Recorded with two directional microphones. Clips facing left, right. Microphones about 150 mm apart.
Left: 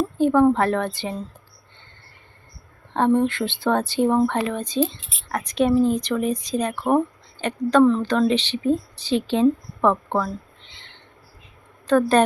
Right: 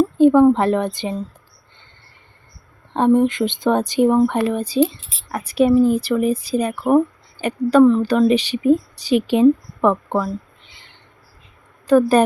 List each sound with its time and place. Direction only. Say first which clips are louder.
0.2 s a woman's voice: right 4 dB; 15° right (ahead or behind)
2.9 s a woman's voice: right 4 dB; 15° right (ahead or behind)
11.9 s a woman's voice: right 4 dB; 10° right (ahead or behind)